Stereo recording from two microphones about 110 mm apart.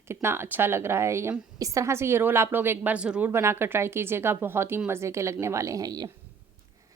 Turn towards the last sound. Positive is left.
turn(degrees=-35)  # may be behind; listen again after turning